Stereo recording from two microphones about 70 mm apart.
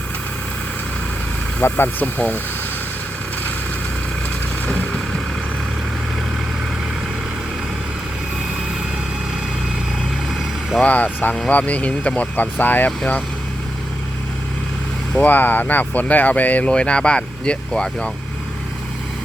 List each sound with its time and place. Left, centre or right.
1.8 s speech: left
4.7 s vehicle: centre
10.8 s speech: left
15.1 s speech: left